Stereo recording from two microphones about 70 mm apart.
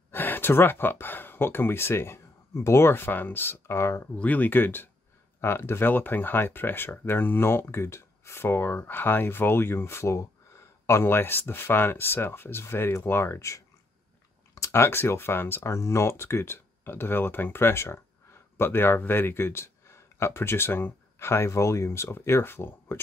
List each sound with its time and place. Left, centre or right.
0.1 s speech: left
4.2 s speech: left